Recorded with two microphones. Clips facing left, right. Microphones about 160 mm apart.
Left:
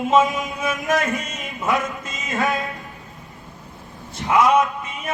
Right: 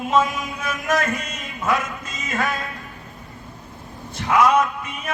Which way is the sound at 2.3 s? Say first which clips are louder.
Left 3 dB; 20° left (ahead or behind).